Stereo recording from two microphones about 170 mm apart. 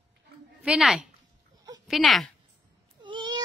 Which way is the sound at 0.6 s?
5° right (ahead or behind).